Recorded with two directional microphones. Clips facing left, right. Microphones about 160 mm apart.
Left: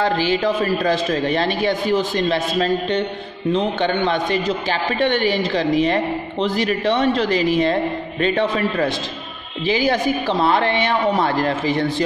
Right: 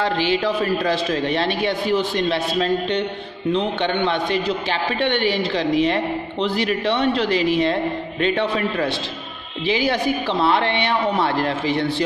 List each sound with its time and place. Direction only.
0.0 s a man's voice: 45° left (ahead or behind)